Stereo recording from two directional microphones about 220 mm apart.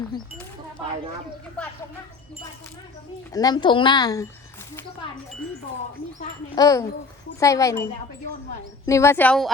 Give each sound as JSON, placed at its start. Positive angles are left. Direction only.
{"t": 3.3, "sound": "speech", "side_deg": 20}
{"t": 6.6, "sound": "speech", "side_deg": 15}
{"t": 8.9, "sound": "speech", "side_deg": 10}